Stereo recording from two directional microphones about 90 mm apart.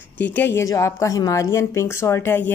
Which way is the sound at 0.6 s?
35° left (ahead or behind).